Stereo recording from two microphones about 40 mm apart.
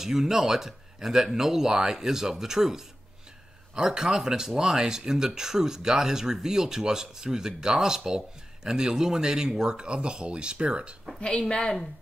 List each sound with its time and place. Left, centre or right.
0.0 s speech: centre; by 11.0 s right
11.2 s a woman's voice: centre